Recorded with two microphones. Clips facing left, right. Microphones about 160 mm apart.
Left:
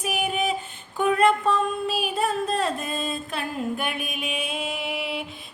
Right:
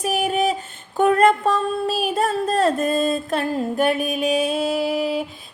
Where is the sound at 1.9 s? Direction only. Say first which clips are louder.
Right 4 dB; 40° right (ahead or behind).